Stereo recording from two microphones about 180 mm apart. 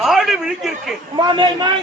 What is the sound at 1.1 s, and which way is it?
Speech, 25° right (ahead or behind).